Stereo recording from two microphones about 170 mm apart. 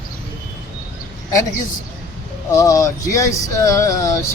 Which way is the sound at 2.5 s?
20° left (ahead or behind).